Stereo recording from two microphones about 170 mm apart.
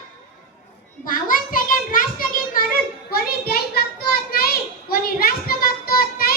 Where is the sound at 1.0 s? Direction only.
55° left (ahead or behind).